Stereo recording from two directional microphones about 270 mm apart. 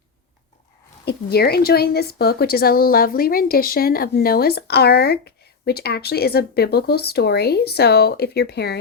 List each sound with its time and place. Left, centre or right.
1.0 s speech: left